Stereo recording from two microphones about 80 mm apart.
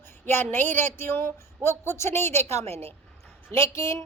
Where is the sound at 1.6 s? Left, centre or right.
Left.